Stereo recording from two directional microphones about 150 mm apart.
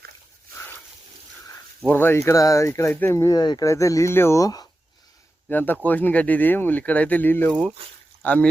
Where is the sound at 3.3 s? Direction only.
30° left (ahead or behind).